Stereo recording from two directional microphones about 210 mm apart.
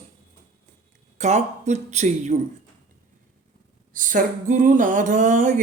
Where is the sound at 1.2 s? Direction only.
35° right (ahead or behind).